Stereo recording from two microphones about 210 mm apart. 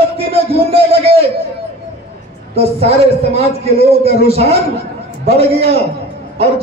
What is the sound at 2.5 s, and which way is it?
A man's voice, 30° right (ahead or behind).